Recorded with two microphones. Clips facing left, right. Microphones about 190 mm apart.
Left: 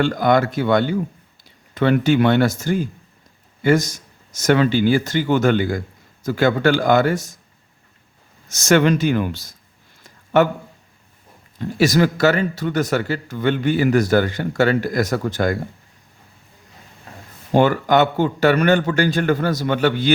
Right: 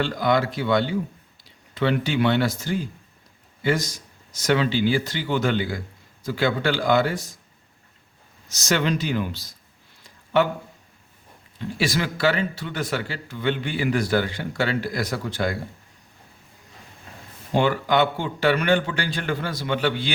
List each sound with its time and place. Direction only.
0.0 s a man's voice: 50° left (ahead or behind)
8.4 s a man's voice: 50° left (ahead or behind)
10.0 s a sound: 50° left (ahead or behind)
11.6 s a man's voice: 45° left (ahead or behind)
17.5 s a man's voice: 45° left (ahead or behind)